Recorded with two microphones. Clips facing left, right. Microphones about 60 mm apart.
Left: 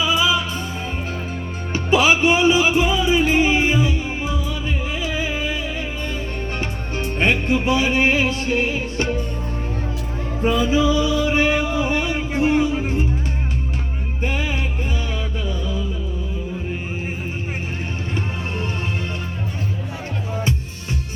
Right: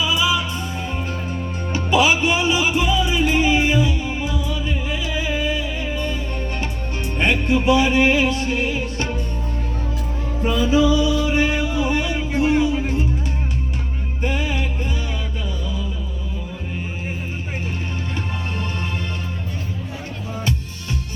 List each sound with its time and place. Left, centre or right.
0.0 s music: left
1.7 s music: left
6.6 s music: left
10.5 s music: left
14.3 s music: left